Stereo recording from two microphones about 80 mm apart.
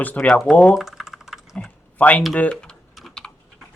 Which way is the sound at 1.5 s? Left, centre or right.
Centre.